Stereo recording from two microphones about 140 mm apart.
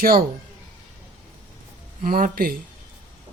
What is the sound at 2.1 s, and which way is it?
Speech, 90° right.